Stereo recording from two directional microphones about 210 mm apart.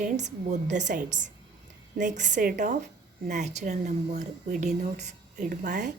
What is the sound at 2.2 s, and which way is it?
Speech, 35° right (ahead or behind).